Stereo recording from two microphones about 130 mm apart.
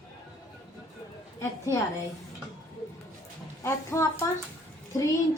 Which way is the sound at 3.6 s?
20° left (ahead or behind).